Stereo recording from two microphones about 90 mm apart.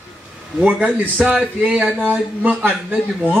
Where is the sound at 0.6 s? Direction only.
15° right (ahead or behind).